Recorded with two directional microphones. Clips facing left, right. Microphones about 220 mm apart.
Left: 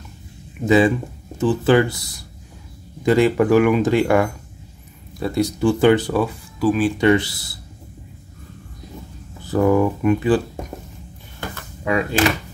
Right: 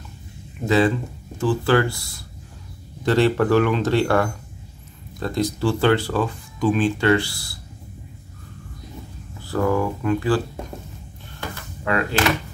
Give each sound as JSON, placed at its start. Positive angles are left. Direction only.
{"t": 0.7, "sound": "speech", "side_deg": 15}
{"t": 7.0, "sound": "speech", "side_deg": 20}
{"t": 9.4, "sound": "speech", "side_deg": 20}
{"t": 11.8, "sound": "speech", "side_deg": 15}